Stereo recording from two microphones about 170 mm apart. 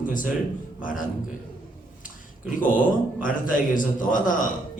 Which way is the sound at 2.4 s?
50° left (ahead or behind).